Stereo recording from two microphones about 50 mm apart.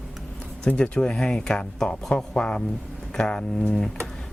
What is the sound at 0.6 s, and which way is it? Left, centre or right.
Speech, centre.